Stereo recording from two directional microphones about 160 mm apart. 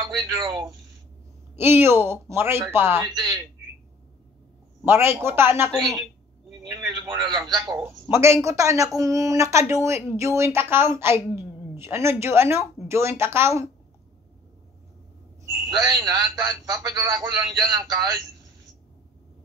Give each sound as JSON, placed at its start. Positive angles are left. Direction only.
{"t": 0.0, "sound": "a man's voice", "side_deg": -20}
{"t": 4.8, "sound": "a man's voice", "side_deg": -15}
{"t": 5.7, "sound": "a woman's voice", "side_deg": 0}
{"t": 6.7, "sound": "a man's voice", "side_deg": -25}
{"t": 15.7, "sound": "a man's voice", "side_deg": -20}